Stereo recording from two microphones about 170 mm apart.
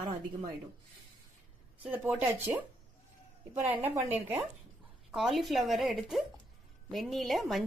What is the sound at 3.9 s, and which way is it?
Speech, 10° right (ahead or behind).